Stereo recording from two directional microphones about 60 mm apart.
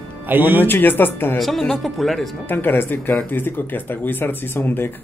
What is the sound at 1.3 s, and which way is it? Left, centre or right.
Speech, centre.